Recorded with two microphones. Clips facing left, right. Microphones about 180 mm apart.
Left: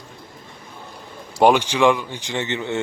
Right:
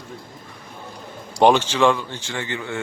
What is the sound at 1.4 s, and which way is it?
Speech, 10° left (ahead or behind).